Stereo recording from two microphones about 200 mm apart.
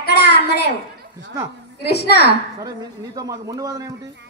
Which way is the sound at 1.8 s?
55° left (ahead or behind).